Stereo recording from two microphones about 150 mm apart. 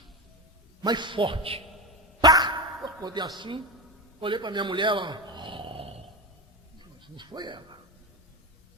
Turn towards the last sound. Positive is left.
turn(degrees=-30)  # may be behind; listen again after turning